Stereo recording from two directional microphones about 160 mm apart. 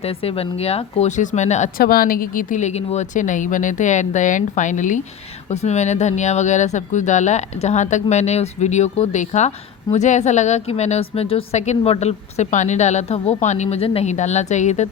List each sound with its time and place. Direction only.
0.0 s speech: 35° left (ahead or behind)
1.8 s speech: 65° left (ahead or behind); by 14.8 s 45° left (ahead or behind)